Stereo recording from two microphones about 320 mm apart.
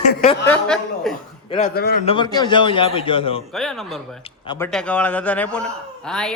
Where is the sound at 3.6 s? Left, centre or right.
Centre.